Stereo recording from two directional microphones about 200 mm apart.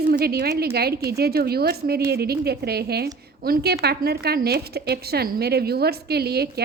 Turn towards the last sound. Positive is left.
turn(degrees=-50)  # may be behind; listen again after turning